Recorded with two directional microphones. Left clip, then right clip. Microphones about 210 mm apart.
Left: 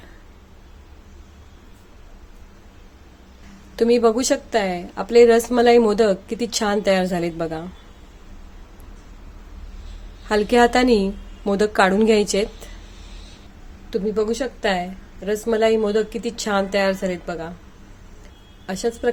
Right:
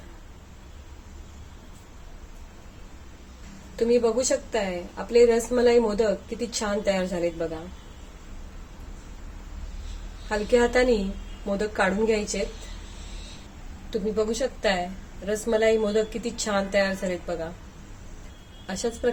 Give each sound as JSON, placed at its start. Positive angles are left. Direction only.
{"t": 3.8, "sound": "a woman's voice", "side_deg": 50}
{"t": 10.2, "sound": "a woman's voice", "side_deg": 45}
{"t": 13.9, "sound": "a woman's voice", "side_deg": 30}
{"t": 18.6, "sound": "a woman's voice", "side_deg": 35}